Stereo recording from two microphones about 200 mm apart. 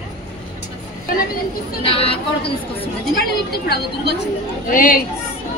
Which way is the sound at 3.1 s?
50° left (ahead or behind).